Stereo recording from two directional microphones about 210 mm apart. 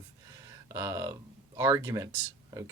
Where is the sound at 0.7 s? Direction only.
15° right (ahead or behind).